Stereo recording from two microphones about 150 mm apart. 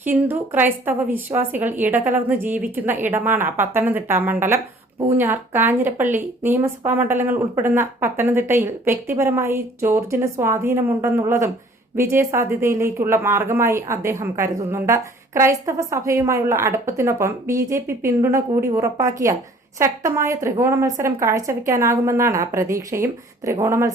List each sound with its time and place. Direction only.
0.0 s a woman's voice: 15° right (ahead or behind)